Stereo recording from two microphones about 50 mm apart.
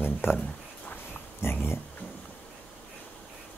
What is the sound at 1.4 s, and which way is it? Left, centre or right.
Speech, left.